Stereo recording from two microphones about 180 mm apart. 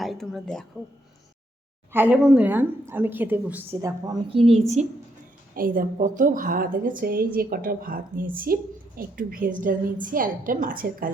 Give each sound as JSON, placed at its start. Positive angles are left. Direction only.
{"t": 0.0, "sound": "a woman's voice", "side_deg": 0}
{"t": 1.9, "sound": "a woman's voice", "side_deg": -10}
{"t": 5.5, "sound": "a woman's voice", "side_deg": -50}